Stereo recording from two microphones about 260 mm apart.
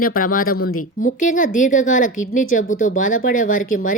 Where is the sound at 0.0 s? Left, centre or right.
Left.